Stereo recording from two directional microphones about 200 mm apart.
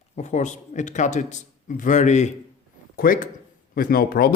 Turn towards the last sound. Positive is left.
turn(degrees=50)  # may be behind; listen again after turning